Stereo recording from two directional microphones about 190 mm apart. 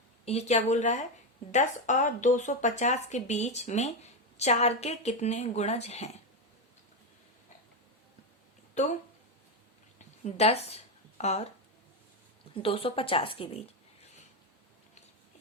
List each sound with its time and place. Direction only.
0.3 s speech: 35° left (ahead or behind)
8.7 s speech: 35° left (ahead or behind)
10.2 s speech: 35° left (ahead or behind)
12.6 s a woman's voice: 30° left (ahead or behind)